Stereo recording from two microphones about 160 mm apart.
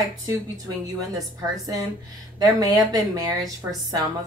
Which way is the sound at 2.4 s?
25° right (ahead or behind).